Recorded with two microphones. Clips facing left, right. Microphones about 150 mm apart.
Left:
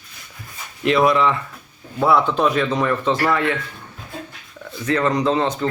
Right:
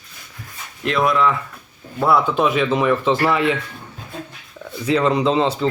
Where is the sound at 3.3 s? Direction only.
20° right (ahead or behind).